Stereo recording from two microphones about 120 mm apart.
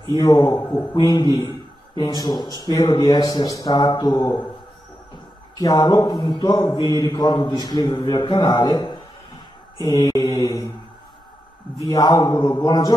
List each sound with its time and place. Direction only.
0.2 s a man's voice: 35° left (ahead or behind)
5.6 s a man's voice: 35° left (ahead or behind)
11.9 s a man's voice: 35° left (ahead or behind)